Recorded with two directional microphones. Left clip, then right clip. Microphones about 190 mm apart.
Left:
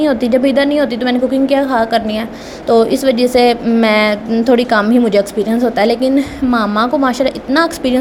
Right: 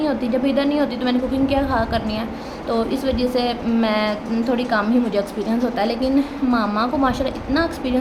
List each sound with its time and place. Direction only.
0.0 s a woman's voice: 35° left (ahead or behind)